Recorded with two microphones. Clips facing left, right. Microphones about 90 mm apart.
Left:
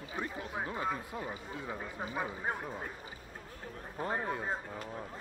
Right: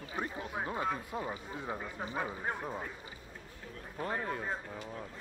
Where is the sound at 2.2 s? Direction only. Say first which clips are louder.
Even; 10° left (ahead or behind).